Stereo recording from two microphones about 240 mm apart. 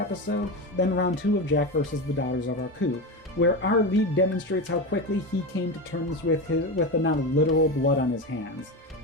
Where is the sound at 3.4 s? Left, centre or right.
Left.